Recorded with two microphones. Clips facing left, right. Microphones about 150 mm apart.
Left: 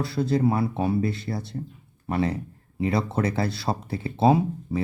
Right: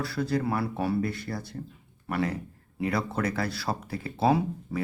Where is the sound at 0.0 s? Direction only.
25° left (ahead or behind).